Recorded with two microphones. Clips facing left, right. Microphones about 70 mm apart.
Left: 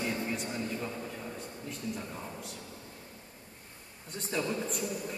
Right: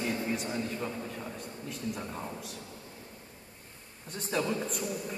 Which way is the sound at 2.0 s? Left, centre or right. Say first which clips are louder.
Right 2 dB; right.